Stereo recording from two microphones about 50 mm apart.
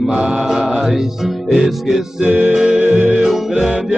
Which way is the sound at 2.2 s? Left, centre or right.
Right.